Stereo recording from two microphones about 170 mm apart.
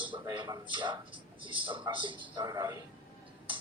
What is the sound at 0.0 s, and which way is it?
A man's voice, 30° right (ahead or behind).